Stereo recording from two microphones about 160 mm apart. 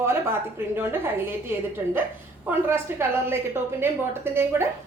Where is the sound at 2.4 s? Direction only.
15° right (ahead or behind).